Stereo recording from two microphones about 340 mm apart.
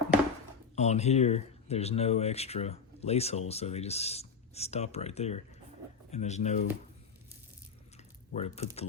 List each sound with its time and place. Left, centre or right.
0.8 s speech: centre
8.4 s speech: centre